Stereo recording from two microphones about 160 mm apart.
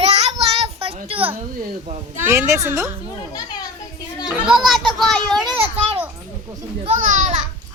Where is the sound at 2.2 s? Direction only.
15° right (ahead or behind).